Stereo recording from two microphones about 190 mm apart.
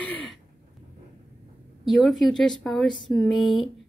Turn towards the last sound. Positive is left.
turn(degrees=0)  # may be behind; listen again after turning